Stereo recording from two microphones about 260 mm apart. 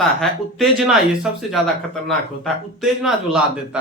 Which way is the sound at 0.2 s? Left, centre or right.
Centre.